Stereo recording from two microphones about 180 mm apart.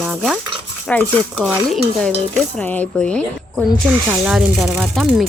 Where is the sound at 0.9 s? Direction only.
5° left (ahead or behind).